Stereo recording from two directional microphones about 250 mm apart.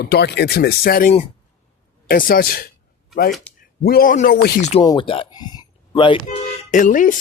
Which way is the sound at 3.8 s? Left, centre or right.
Left.